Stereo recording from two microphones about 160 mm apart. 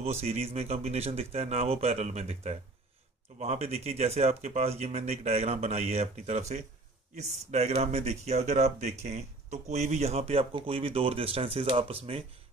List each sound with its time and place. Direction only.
0.0 s speech: 40° right (ahead or behind)